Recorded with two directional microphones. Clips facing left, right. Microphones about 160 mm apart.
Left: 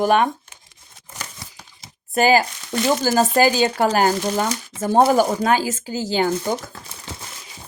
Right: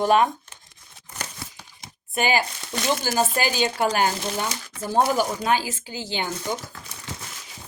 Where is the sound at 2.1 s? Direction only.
40° left (ahead or behind).